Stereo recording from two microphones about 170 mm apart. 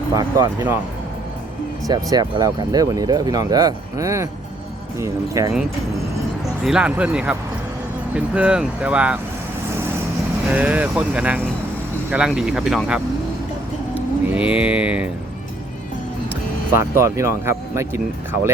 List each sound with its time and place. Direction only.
0.1 s speech: 20° right (ahead or behind)
1.9 s speech: 25° right (ahead or behind)
6.7 s speech: 5° right (ahead or behind)
10.5 s speech: 10° right (ahead or behind)
14.3 s speech: 5° right (ahead or behind)
16.7 s speech: 15° right (ahead or behind)